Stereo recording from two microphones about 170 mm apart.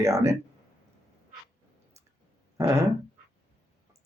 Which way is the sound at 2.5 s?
15° right (ahead or behind).